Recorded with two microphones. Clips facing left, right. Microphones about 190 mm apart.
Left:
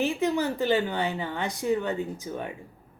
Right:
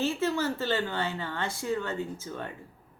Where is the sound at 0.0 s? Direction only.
15° left (ahead or behind).